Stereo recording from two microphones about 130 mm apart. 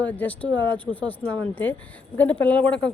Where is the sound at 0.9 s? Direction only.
10° left (ahead or behind).